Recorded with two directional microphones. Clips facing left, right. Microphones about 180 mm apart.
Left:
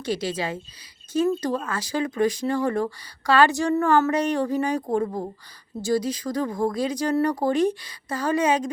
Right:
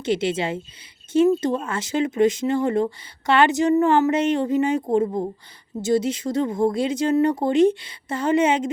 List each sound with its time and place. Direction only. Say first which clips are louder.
0.0 s speech: right 4 dB; 25° right (ahead or behind)